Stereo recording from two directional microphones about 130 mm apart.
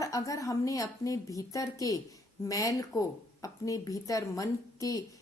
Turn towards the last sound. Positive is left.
turn(degrees=25)  # may be behind; listen again after turning